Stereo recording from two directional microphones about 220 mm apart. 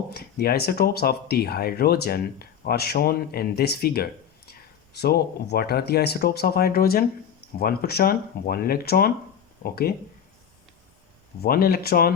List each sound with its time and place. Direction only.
0.1 s speech: 45° left (ahead or behind)
11.4 s speech: 45° left (ahead or behind)